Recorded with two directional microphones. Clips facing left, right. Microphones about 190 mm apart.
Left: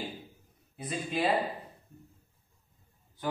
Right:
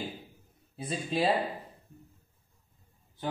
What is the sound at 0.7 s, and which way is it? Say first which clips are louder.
Speech: right 1 dB; 30° right (ahead or behind).